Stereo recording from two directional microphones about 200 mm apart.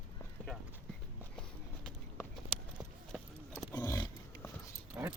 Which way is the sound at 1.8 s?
5° left (ahead or behind).